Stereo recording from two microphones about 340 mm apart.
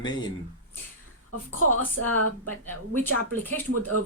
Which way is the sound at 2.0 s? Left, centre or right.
Right.